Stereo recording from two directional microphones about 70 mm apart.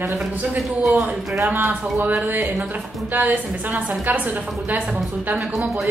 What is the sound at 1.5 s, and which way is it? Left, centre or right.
A woman's voice, right.